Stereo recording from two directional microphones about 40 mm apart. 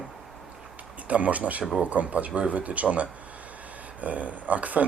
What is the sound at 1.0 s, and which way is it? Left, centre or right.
Speech, right.